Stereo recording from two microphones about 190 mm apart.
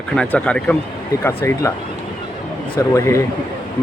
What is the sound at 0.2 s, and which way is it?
Speech, 5° left (ahead or behind).